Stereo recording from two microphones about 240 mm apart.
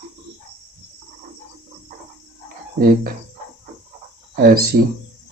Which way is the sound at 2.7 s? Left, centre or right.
Right.